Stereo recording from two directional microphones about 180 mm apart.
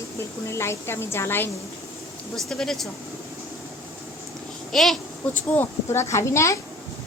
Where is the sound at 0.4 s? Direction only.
15° left (ahead or behind).